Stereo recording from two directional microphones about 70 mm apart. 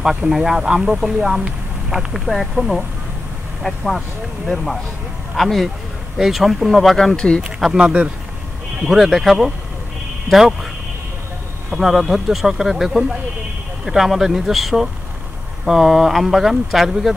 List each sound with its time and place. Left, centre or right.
0.0 s speech: centre
5.3 s speech: centre
7.7 s speech: centre
8.8 s speech: centre
11.7 s speech: centre